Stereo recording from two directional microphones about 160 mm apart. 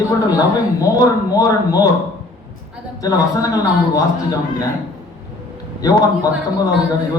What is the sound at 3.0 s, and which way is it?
A man's voice, 20° left (ahead or behind).